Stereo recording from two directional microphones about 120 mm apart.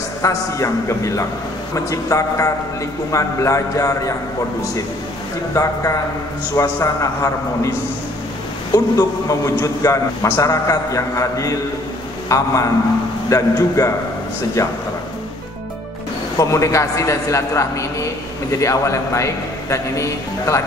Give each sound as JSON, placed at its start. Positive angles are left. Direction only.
{"t": 0.2, "sound": "a man's voice", "side_deg": 25}
{"t": 5.5, "sound": "a man's voice", "side_deg": 25}
{"t": 8.7, "sound": "a man's voice", "side_deg": 30}
{"t": 16.3, "sound": "a man's voice", "side_deg": 25}